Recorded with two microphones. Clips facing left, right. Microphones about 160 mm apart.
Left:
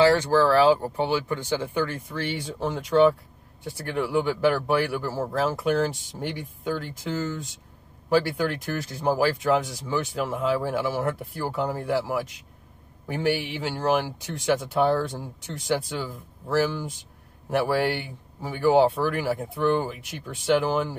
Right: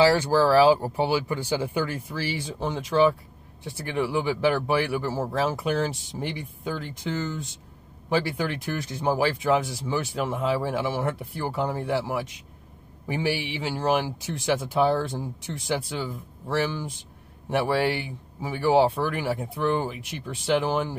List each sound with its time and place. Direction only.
0.0 s speech: 10° right (ahead or behind)